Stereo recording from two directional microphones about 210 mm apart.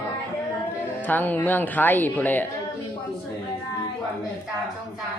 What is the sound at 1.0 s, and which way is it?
Speech, 10° left (ahead or behind).